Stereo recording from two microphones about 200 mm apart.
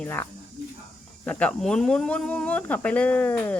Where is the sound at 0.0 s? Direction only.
10° left (ahead or behind).